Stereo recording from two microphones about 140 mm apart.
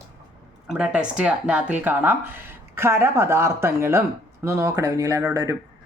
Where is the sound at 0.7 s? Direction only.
5° right (ahead or behind); by 5.6 s 25° right (ahead or behind).